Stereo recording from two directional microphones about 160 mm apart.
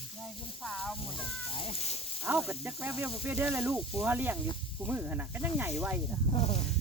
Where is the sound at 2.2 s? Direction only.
10° right (ahead or behind).